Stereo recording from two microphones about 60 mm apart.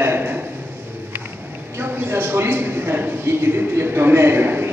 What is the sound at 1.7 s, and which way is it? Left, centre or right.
A man's voice, right.